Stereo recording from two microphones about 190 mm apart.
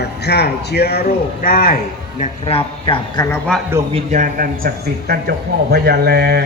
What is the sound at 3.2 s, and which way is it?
Speech, 10° left (ahead or behind).